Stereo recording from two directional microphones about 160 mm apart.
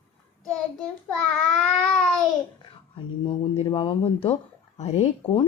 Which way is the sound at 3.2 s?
30° left (ahead or behind).